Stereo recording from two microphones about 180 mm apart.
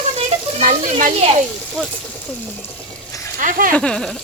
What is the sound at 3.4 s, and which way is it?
Speech, 50° right (ahead or behind).